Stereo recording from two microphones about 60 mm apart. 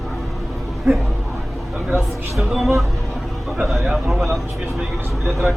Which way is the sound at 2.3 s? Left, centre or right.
Centre.